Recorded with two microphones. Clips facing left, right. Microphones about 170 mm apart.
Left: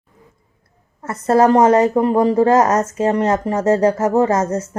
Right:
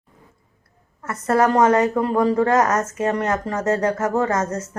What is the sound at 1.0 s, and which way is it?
A woman's voice, 30° left (ahead or behind).